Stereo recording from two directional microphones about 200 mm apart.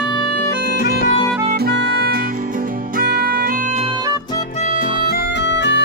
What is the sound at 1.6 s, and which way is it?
Music, 55° right (ahead or behind).